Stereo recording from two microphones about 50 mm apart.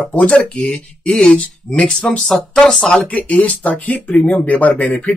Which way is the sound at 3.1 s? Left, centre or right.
Left.